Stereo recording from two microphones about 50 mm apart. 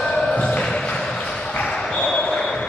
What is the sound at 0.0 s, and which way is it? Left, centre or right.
Basketball bounce, centre.